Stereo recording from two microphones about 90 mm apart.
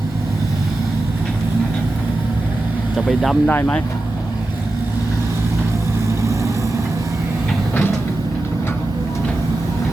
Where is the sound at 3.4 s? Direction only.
15° left (ahead or behind).